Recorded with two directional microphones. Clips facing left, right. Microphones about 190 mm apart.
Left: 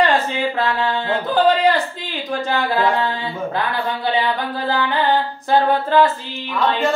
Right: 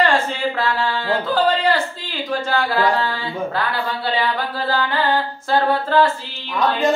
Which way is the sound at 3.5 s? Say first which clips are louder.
Left 1 dB; 20° left (ahead or behind).